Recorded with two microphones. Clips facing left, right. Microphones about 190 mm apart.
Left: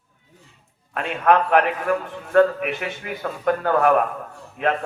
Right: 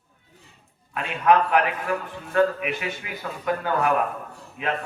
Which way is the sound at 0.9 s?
55° left (ahead or behind).